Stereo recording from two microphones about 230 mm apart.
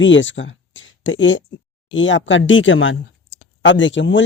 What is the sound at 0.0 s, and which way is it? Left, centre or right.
Speech, left.